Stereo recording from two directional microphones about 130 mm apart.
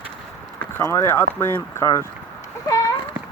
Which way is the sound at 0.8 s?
20° left (ahead or behind).